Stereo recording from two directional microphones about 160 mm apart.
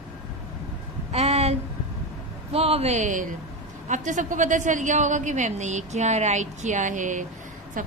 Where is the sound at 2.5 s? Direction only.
40° right (ahead or behind).